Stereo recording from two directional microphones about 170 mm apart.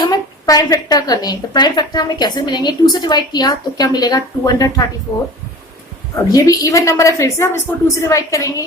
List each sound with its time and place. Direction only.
0.0 s a woman's voice: 20° left (ahead or behind)
6.3 s a woman's voice: 20° left (ahead or behind)